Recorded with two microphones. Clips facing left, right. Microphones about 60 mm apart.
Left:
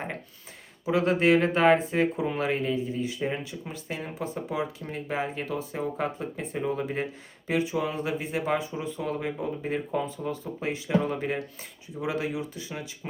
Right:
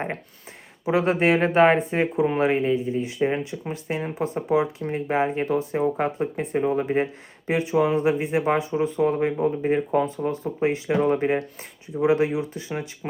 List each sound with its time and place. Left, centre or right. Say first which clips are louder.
0.9 s speech: right 2 dB; right